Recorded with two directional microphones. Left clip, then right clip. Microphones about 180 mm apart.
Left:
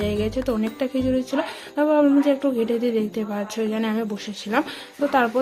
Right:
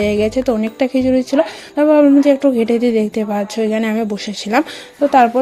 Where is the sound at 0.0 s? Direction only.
35° right (ahead or behind).